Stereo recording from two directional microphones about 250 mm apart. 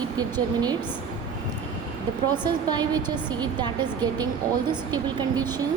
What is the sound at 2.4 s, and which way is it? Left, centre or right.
A woman's voice, centre.